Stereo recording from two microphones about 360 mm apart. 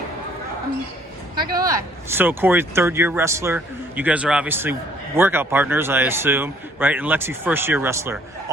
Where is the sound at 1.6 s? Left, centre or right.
Centre.